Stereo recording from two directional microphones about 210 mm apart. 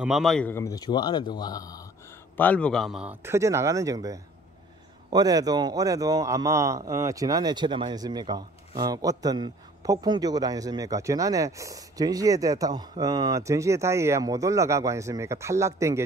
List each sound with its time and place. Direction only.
0.0 s a man's voice: centre (ahead or behind)